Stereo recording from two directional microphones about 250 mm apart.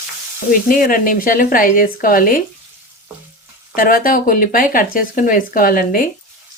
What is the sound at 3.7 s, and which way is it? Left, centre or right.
Speech, left.